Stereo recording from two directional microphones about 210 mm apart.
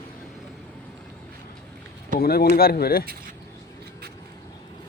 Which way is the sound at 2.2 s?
45° left (ahead or behind).